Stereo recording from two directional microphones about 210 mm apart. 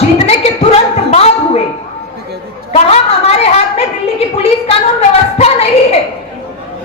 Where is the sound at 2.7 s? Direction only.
30° left (ahead or behind).